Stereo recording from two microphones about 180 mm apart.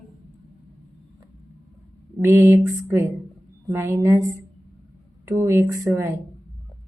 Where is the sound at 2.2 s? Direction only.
15° right (ahead or behind).